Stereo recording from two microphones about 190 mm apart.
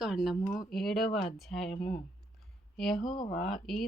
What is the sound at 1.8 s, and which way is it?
Speech, 50° left (ahead or behind).